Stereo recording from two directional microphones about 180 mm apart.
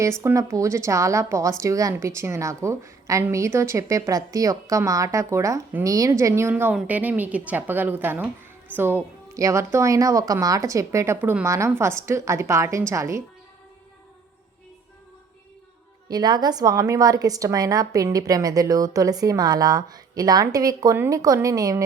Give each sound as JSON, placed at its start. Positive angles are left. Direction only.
{"t": 0.0, "sound": "speech", "side_deg": -15}
{"t": 16.0, "sound": "a woman's voice", "side_deg": -25}